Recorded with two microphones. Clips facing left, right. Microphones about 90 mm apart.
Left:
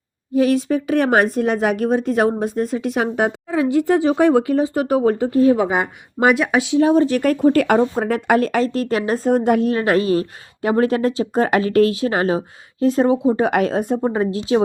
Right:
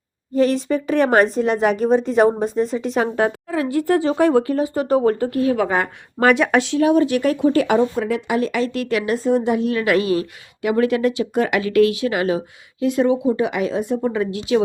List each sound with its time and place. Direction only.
0.3 s speech: 5° left (ahead or behind)
1.3 s a woman's voice: 55° left (ahead or behind)
1.8 s a woman's voice: 5° left (ahead or behind)
6.3 s speech: 5° left (ahead or behind)
6.7 s speech: 30° left (ahead or behind); by 9.7 s 50° left (ahead or behind)
9.7 s speech: 35° left (ahead or behind)
13.4 s speech: 50° left (ahead or behind); by 14.6 s 30° left (ahead or behind)